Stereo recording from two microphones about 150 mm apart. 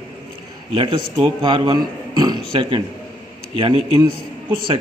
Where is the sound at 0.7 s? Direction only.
35° right (ahead or behind).